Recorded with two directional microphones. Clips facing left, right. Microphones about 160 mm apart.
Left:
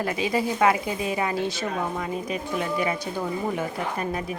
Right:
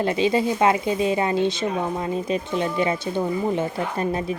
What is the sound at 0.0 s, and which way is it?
Speech, 25° right (ahead or behind).